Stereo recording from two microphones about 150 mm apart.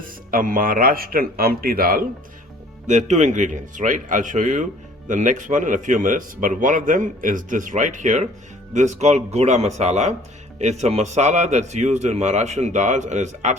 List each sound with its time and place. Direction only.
0.0 s speech: 65° right (ahead or behind)
2.8 s a man's voice: 50° right (ahead or behind)